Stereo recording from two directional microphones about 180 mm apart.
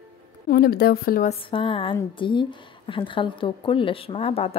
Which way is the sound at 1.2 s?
30° left (ahead or behind).